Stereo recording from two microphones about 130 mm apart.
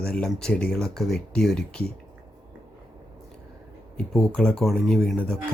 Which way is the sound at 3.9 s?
5° left (ahead or behind).